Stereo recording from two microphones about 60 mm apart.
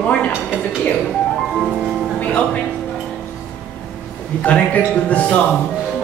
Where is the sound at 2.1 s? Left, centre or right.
Left.